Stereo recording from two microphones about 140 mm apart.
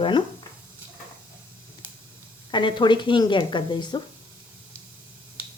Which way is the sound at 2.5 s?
35° left (ahead or behind).